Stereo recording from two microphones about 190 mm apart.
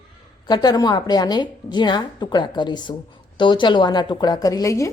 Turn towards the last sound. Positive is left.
turn(degrees=15)  # may be behind; listen again after turning